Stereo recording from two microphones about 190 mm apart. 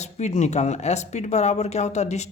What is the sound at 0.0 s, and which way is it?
Speech, 35° left (ahead or behind).